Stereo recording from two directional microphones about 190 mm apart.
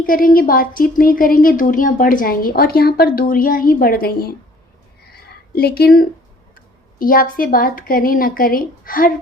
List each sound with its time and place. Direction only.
0.0 s speech: 45° left (ahead or behind)
5.5 s speech: 55° left (ahead or behind)